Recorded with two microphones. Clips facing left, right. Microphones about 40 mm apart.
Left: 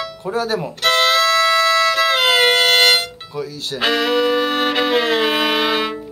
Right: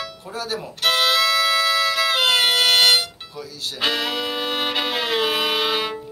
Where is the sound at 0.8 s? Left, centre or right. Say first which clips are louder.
Left 3 dB; centre.